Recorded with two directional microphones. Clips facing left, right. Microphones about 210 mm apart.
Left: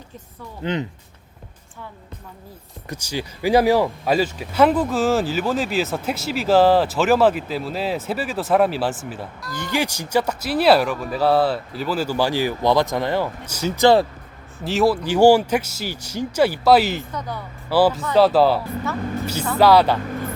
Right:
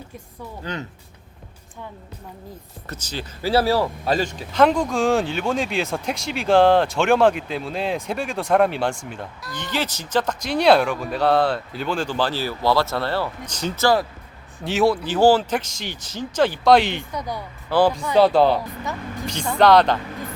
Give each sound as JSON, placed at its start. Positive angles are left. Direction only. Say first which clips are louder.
{"t": 0.6, "sound": "speech", "louder": "left 7 dB", "side_deg": 20}
{"t": 2.8, "sound": "speech", "louder": "left 4 dB", "side_deg": 10}
{"t": 13.8, "sound": "speech", "louder": "left 5 dB", "side_deg": 30}
{"t": 14.6, "sound": "speech", "louder": "left 1 dB", "side_deg": 0}
{"t": 15.0, "sound": "speech", "louder": "left 3 dB", "side_deg": 10}
{"t": 17.1, "sound": "speech", "louder": "right 1 dB", "side_deg": -10}
{"t": 17.7, "sound": "speech", "louder": "left 1 dB", "side_deg": 5}